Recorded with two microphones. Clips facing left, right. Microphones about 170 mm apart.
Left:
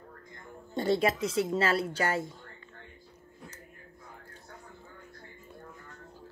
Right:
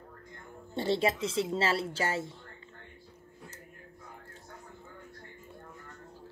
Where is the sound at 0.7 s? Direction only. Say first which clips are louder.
Left 2 dB; 25° right (ahead or behind).